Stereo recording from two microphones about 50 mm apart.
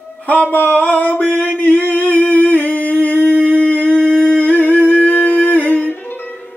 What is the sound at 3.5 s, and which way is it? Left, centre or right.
Humming, left.